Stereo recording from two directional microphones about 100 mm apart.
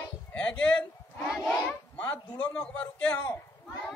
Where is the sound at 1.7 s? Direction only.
20° left (ahead or behind).